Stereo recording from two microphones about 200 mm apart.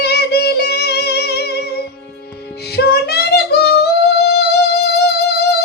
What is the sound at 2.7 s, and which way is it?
Female singing, 55° left (ahead or behind).